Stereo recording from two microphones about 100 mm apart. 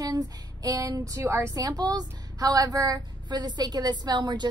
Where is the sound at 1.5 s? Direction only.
40° right (ahead or behind).